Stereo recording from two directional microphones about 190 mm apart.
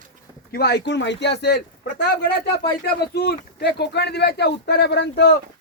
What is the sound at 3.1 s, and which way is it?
Speech, 60° left (ahead or behind).